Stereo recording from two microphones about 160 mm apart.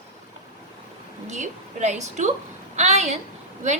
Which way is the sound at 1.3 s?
45° right (ahead or behind).